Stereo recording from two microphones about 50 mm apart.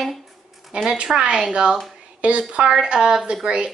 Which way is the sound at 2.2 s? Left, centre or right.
Right.